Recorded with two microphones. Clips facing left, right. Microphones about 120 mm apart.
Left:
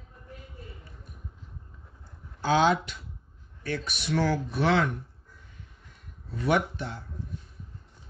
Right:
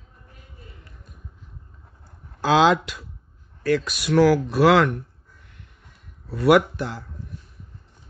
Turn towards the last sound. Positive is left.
turn(degrees=-90)